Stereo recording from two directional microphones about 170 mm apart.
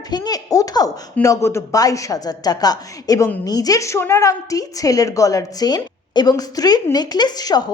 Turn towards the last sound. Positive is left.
turn(degrees=25)  # may be behind; listen again after turning